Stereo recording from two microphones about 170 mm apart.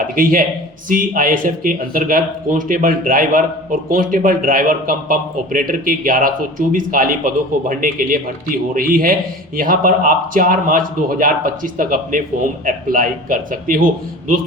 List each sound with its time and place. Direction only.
0.0 s speech: 55° right (ahead or behind)